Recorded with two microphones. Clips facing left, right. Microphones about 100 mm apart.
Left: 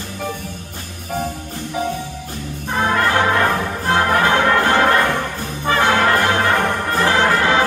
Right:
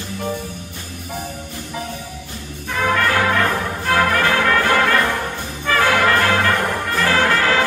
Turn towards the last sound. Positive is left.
turn(degrees=20)  # may be behind; listen again after turning